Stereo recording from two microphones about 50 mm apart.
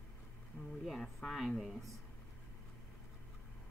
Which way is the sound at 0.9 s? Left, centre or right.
Centre.